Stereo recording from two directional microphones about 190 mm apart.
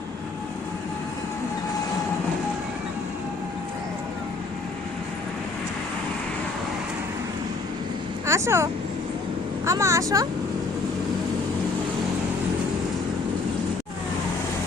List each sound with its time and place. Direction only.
8.3 s speech: 15° right (ahead or behind)